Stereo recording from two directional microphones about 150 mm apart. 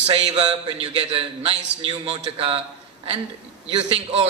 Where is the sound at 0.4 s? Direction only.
40° right (ahead or behind).